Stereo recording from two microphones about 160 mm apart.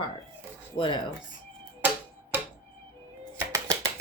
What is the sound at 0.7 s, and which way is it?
Speech, 30° left (ahead or behind).